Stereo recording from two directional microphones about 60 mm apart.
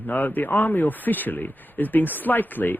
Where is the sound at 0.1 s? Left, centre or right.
Left.